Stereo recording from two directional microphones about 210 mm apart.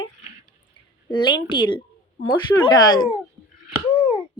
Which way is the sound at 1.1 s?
20° left (ahead or behind).